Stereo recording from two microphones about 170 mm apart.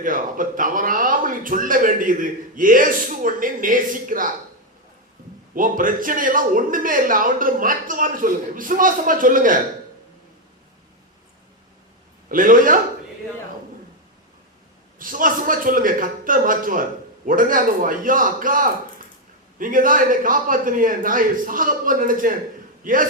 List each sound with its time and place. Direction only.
0.0 s a man's voice: 50° right (ahead or behind)
5.5 s a man's voice: 55° right (ahead or behind)
12.3 s a man's voice: 55° right (ahead or behind)
14.9 s a man's voice: 55° right (ahead or behind)